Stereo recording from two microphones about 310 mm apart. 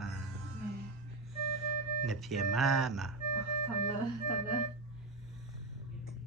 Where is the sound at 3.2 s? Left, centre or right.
Right.